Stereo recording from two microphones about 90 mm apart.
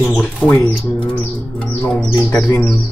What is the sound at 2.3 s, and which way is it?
Speech, 25° left (ahead or behind).